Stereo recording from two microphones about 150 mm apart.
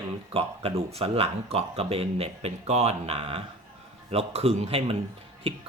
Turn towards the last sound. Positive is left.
turn(degrees=-40)  # may be behind; listen again after turning